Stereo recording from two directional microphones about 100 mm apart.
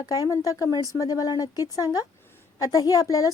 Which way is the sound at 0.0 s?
35° left (ahead or behind).